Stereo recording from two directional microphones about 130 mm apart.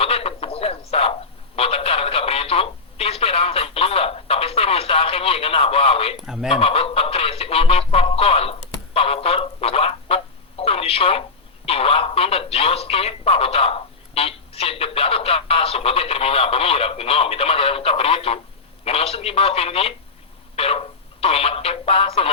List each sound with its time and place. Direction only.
0.0 s frog: 50° left (ahead or behind)
1.5 s telephone: 50° left (ahead or behind)
6.2 s speech: 5° right (ahead or behind)
6.5 s music: 50° left (ahead or behind)
10.6 s telephone: 50° left (ahead or behind)
11.6 s speech: 50° left (ahead or behind)
20.6 s music: 50° left (ahead or behind)